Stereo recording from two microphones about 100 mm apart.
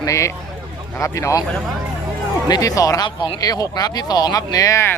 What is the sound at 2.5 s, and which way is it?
Speech, 35° left (ahead or behind).